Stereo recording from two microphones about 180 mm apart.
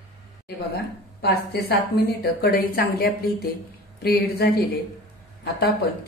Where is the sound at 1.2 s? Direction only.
60° left (ahead or behind).